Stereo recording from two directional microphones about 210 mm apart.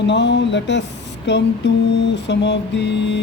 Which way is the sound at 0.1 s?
55° left (ahead or behind).